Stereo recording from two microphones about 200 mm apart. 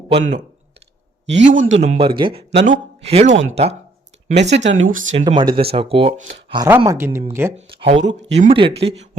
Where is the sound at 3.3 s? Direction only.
70° right (ahead or behind).